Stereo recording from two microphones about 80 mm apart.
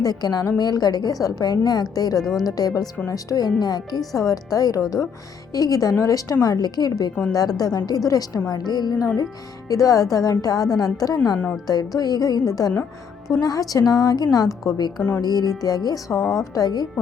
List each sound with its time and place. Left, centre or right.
0.0 s a woman's voice: left
8.4 s a woman's voice: left
9.6 s a woman's voice: left
14.4 s a woman's voice: centre
15.2 s a woman's voice: left